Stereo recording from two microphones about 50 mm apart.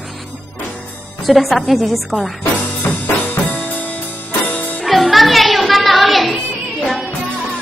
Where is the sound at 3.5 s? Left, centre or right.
Left.